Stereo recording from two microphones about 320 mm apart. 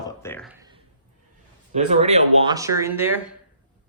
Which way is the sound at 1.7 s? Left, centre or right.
Right.